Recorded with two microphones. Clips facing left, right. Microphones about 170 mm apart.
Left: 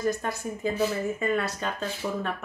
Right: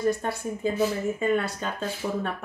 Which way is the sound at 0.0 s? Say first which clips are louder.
Right 2 dB; 30° right (ahead or behind).